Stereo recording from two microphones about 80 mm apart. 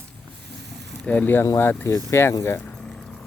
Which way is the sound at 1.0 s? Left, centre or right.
Centre.